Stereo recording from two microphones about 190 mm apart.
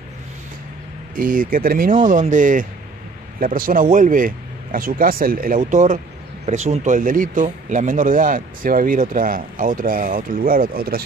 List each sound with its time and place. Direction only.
1.1 s speech: 45° right (ahead or behind)